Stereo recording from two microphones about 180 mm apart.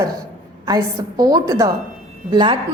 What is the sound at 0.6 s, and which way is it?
A woman's voice, 20° right (ahead or behind).